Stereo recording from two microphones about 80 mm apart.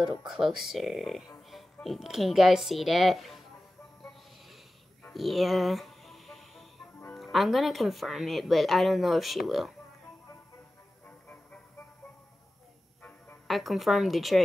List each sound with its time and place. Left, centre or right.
0.2 s speech: centre
5.1 s music: centre
7.2 s speech: centre
11.1 s music: centre
13.5 s speech: centre